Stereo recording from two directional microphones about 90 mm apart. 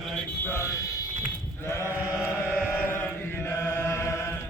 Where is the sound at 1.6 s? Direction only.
30° left (ahead or behind).